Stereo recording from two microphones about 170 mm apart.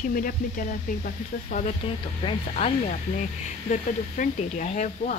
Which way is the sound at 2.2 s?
40° left (ahead or behind).